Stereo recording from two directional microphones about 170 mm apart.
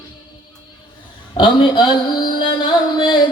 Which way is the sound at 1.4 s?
30° left (ahead or behind).